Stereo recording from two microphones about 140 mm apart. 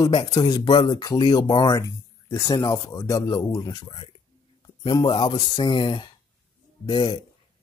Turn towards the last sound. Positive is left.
turn(degrees=30)  # may be behind; listen again after turning